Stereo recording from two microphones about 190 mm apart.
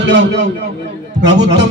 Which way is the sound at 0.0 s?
70° right (ahead or behind).